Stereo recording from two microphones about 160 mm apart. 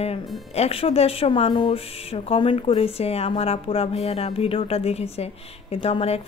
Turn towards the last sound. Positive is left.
turn(degrees=40)  # may be behind; listen again after turning